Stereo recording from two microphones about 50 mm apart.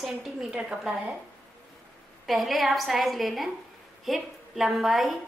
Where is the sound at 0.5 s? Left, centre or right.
Right.